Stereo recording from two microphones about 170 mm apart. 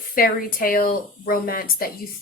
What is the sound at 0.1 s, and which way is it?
A woman's voice, 55° left (ahead or behind).